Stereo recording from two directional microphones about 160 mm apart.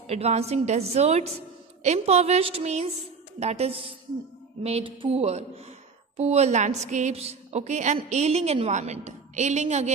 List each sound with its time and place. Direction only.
0.0 s a woman's voice: 40° right (ahead or behind)